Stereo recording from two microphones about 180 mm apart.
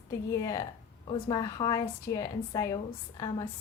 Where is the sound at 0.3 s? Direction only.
20° left (ahead or behind).